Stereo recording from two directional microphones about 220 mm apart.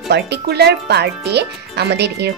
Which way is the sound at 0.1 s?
45° right (ahead or behind).